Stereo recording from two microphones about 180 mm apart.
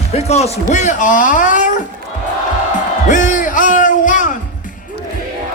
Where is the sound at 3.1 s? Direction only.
45° left (ahead or behind).